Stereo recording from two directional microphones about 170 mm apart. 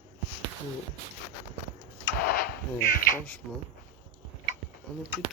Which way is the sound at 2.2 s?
55° left (ahead or behind).